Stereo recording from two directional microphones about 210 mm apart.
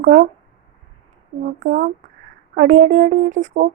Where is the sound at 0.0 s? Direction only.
40° right (ahead or behind).